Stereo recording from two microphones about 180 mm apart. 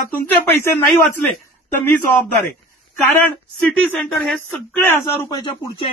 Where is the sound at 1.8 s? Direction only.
10° left (ahead or behind).